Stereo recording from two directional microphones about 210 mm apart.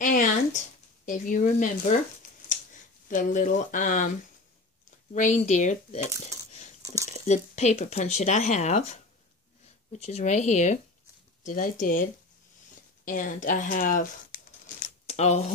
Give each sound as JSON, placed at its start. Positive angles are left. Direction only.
{"t": 0.0, "sound": "a sound", "side_deg": 40}
{"t": 1.0, "sound": "speech", "side_deg": 40}
{"t": 3.1, "sound": "speech", "side_deg": 40}
{"t": 5.1, "sound": "speech", "side_deg": 35}
{"t": 7.1, "sound": "speech", "side_deg": 35}